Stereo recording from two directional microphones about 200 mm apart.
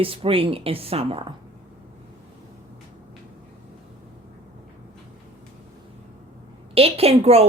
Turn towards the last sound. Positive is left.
turn(degrees=-30)  # may be behind; listen again after turning